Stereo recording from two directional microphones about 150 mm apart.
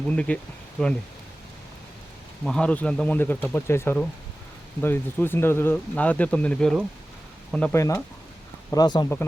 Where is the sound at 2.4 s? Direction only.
5° left (ahead or behind).